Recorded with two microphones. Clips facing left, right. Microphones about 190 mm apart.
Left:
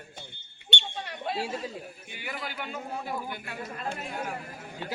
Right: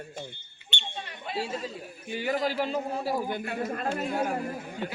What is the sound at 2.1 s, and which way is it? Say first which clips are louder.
A man's voice: right 11 dB; 40° right (ahead or behind).